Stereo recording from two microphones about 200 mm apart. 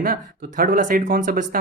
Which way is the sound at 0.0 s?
45° right (ahead or behind).